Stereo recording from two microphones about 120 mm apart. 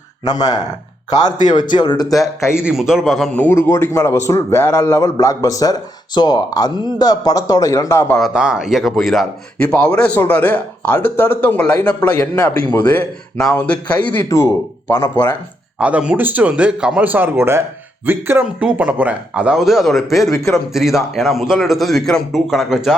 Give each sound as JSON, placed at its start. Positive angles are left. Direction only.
{"t": 0.3, "sound": "speech", "side_deg": 35}
{"t": 1.7, "sound": "speech", "side_deg": 40}
{"t": 2.4, "sound": "a man's voice", "side_deg": 20}
{"t": 2.6, "sound": "a man's voice", "side_deg": -5}
{"t": 3.3, "sound": "a man's voice", "side_deg": 15}
{"t": 8.2, "sound": "a man's voice", "side_deg": -5}
{"t": 9.6, "sound": "speech", "side_deg": 10}
{"t": 15.8, "sound": "a man's voice", "side_deg": -10}